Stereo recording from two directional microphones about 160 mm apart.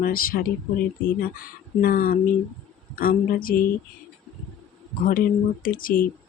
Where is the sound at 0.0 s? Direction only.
65° left (ahead or behind).